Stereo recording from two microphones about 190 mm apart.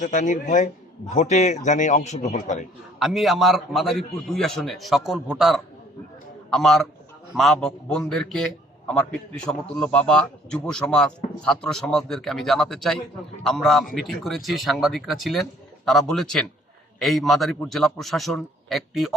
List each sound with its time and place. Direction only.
0.0 s a man's voice: 40° left (ahead or behind)
3.0 s speech: centre (ahead or behind)